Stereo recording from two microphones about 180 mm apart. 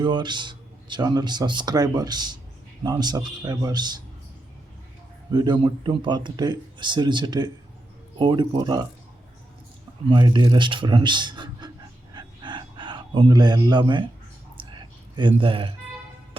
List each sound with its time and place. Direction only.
0.0 s speech: 25° right (ahead or behind)
5.3 s speech: 25° right (ahead or behind)
10.1 s speech: 25° right (ahead or behind)
12.1 s a sound: 25° right (ahead or behind)
15.4 s speech: 30° right (ahead or behind)